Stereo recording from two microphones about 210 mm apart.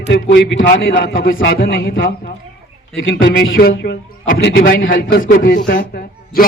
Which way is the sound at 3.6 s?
50° left (ahead or behind).